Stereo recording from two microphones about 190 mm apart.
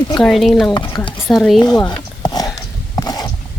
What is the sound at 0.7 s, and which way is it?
Speech, 25° left (ahead or behind).